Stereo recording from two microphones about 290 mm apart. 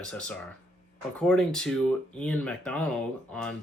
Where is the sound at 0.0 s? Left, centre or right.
Centre.